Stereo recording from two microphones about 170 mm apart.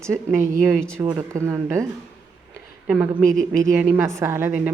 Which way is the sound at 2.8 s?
10° right (ahead or behind).